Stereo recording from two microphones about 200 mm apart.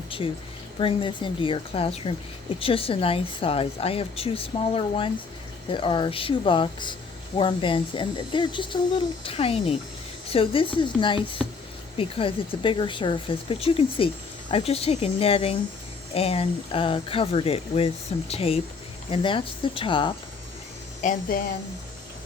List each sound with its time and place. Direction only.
0.8 s speech: 25° left (ahead or behind)
21.0 s speech: 45° left (ahead or behind)